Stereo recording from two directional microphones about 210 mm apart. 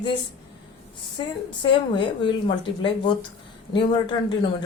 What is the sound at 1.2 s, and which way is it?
Speech, 20° left (ahead or behind).